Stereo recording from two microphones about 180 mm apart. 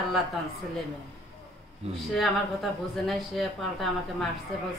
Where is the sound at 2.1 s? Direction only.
Centre (ahead or behind).